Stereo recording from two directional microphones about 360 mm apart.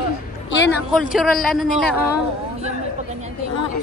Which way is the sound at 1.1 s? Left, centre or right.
Centre.